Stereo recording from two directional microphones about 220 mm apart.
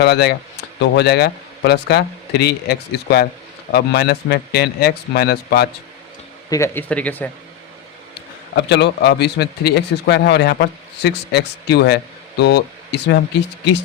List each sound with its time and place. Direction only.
0.0 s a man's voice: 50° left (ahead or behind)
6.5 s speech: 10° left (ahead or behind)
8.5 s a man's voice: 50° left (ahead or behind)